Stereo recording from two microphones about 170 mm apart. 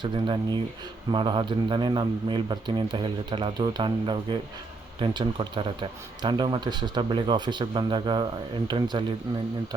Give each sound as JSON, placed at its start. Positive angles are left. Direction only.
{"t": 0.0, "sound": "speech", "side_deg": -25}